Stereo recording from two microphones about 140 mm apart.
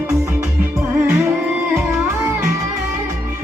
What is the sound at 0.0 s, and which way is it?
Music, 20° right (ahead or behind).